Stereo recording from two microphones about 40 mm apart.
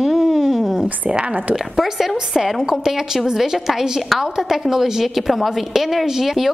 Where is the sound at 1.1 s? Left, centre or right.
Right.